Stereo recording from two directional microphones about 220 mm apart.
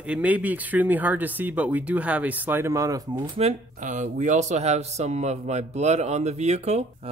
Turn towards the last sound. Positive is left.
turn(degrees=-30)  # may be behind; listen again after turning